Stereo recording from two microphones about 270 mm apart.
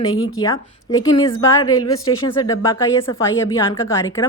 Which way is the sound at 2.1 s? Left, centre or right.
Centre.